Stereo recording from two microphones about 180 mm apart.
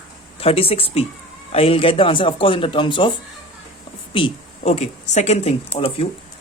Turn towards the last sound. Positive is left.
turn(degrees=35)  # may be behind; listen again after turning